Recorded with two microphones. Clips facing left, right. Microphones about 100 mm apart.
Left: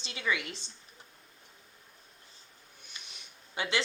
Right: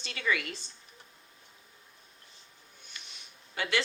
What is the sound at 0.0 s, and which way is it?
Speech, 20° left (ahead or behind).